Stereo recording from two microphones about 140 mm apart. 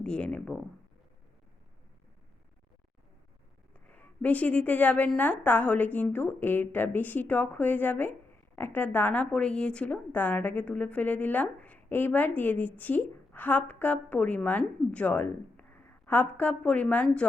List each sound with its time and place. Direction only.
0.0 s a woman's voice: 10° left (ahead or behind)
3.8 s a woman's voice: 10° left (ahead or behind)